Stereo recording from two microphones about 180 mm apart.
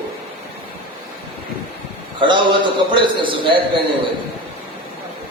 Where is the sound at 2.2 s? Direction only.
25° right (ahead or behind).